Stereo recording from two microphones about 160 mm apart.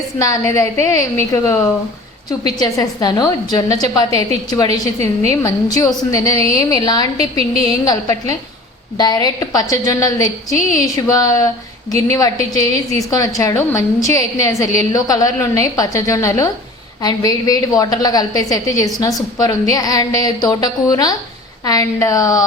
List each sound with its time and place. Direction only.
0.2 s a woman's voice: 20° left (ahead or behind)
2.6 s a woman's voice: 25° left (ahead or behind)
9.0 s a woman's voice: 25° left (ahead or behind)